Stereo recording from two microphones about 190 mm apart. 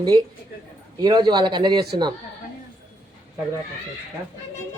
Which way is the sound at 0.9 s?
20° right (ahead or behind).